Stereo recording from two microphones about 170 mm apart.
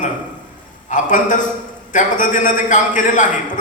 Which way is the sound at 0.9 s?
50° left (ahead or behind).